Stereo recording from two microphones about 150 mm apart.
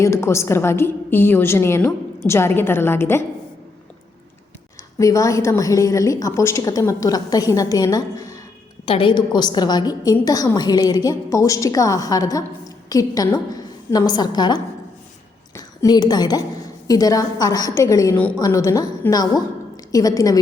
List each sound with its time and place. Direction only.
0.0 s a woman's voice: 15° left (ahead or behind)
4.9 s a woman's voice: 20° left (ahead or behind)
8.9 s a woman's voice: 35° left (ahead or behind)